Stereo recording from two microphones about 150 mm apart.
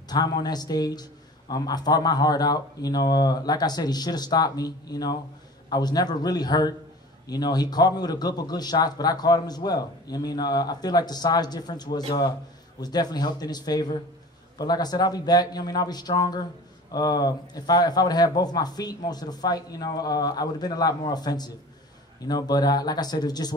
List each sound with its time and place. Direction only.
0.1 s a man's voice: 25° left (ahead or behind)